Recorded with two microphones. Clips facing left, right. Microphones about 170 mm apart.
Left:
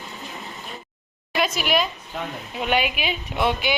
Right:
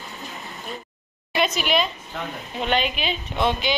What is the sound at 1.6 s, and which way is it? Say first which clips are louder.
A woman's voice: even; 5° left (ahead or behind).